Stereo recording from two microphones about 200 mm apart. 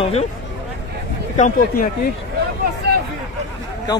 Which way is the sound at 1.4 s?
40° left (ahead or behind).